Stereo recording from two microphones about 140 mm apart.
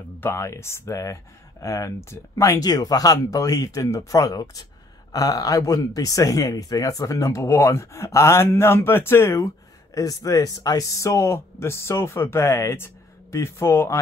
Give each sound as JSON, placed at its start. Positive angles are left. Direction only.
{"t": 0.2, "sound": "speech", "side_deg": 20}